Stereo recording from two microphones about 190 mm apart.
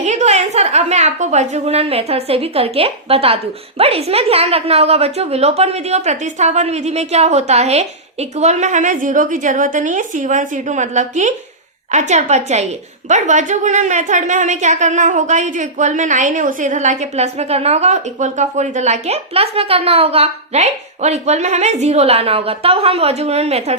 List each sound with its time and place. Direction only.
0.0 s a woman's voice: 35° right (ahead or behind)